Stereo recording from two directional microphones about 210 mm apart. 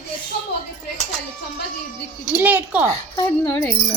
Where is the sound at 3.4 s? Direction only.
10° left (ahead or behind).